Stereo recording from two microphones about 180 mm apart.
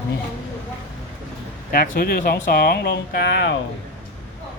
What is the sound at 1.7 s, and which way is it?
Speech, 50° left (ahead or behind).